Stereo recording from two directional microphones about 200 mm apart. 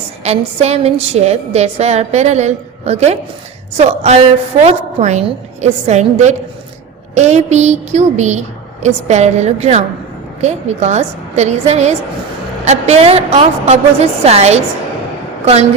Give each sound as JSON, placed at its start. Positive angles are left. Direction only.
{"t": 0.3, "sound": "a woman's voice", "side_deg": -30}